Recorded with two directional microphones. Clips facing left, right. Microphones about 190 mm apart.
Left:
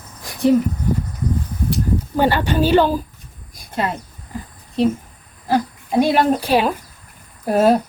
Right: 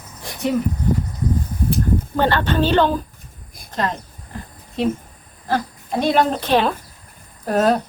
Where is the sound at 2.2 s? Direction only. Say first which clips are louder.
Left 2 dB; 10° left (ahead or behind).